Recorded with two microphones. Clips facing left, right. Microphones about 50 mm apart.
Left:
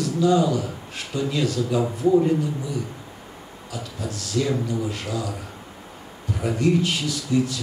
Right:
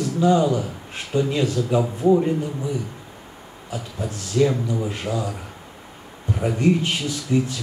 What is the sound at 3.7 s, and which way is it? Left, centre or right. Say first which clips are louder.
Speech: right 2 dB; right.